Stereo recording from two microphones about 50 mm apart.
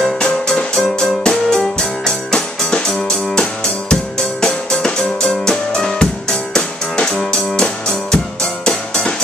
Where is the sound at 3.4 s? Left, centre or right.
Centre.